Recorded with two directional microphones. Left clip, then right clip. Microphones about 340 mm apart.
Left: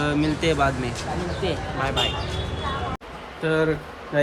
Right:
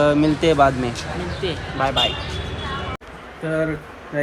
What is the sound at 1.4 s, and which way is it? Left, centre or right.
Speech, centre.